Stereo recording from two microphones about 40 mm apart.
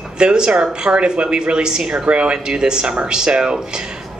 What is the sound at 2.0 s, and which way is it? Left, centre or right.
Speech, right.